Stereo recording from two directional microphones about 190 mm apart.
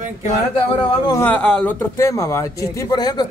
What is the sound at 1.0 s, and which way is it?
A man's voice, 15° left (ahead or behind).